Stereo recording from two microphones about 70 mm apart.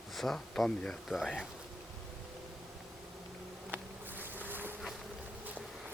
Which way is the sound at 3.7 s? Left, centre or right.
Right.